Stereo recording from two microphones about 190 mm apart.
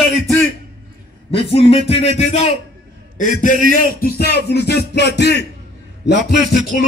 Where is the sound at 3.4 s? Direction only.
45° left (ahead or behind); by 6.8 s 60° left (ahead or behind).